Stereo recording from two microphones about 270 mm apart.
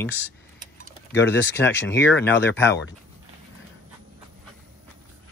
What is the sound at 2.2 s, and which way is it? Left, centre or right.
Speech, centre.